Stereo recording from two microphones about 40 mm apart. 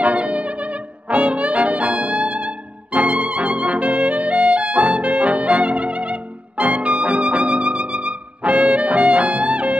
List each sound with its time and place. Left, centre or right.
0.0 s music: right
1.1 s trumpet: right